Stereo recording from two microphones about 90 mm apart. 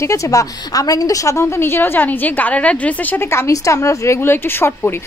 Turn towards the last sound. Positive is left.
turn(degrees=25)  # may be behind; listen again after turning